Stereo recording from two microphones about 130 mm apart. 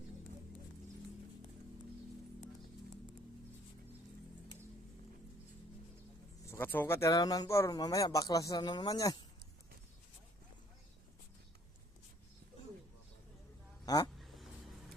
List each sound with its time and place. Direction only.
6.4 s a man's voice: 20° left (ahead or behind)
13.8 s vehicle: 30° left (ahead or behind)